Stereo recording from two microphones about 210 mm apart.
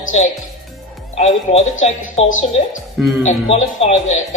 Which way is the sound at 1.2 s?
35° left (ahead or behind).